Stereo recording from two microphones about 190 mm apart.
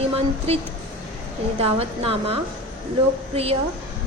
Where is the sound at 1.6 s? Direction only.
30° right (ahead or behind).